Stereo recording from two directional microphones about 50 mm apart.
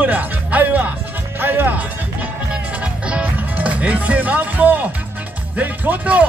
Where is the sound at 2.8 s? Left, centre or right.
Right.